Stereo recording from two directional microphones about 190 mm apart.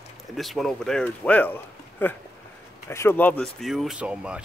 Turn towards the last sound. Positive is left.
turn(degrees=-5)  # may be behind; listen again after turning